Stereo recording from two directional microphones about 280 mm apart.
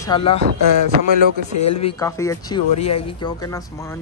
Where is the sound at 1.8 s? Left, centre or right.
Centre.